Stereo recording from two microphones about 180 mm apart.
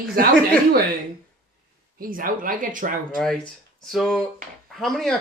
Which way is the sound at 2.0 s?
50° right (ahead or behind).